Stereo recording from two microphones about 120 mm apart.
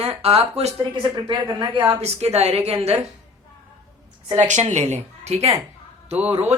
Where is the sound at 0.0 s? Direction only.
55° right (ahead or behind).